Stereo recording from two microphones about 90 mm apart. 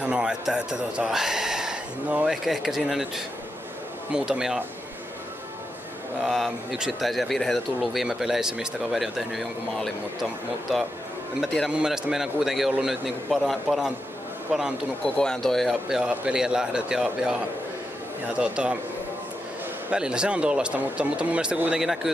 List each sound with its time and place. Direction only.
0.0 s speech: 10° right (ahead or behind)
4.1 s speech: 10° right (ahead or behind)
6.2 s speech: centre (ahead or behind)
11.7 s speech: 5° right (ahead or behind)
15.0 s speech: 10° left (ahead or behind)
16.0 s speech: 10° right (ahead or behind)
19.9 s speech: 10° right (ahead or behind)